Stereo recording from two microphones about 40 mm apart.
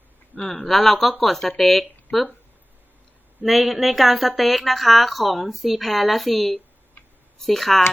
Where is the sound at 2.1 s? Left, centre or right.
Left.